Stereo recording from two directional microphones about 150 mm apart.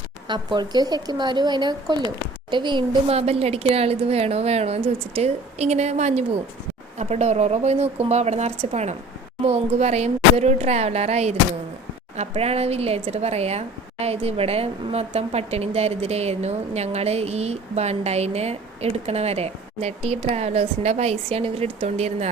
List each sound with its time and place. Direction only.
0.3 s speech: 30° right (ahead or behind); by 22.3 s 45° right (ahead or behind)